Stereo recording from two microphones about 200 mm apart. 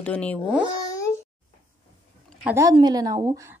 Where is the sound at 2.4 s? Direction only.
15° right (ahead or behind).